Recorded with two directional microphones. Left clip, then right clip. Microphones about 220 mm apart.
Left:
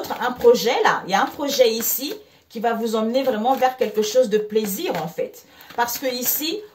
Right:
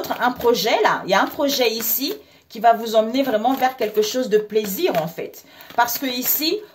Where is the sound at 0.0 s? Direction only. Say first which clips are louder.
Left 2 dB; 45° right (ahead or behind).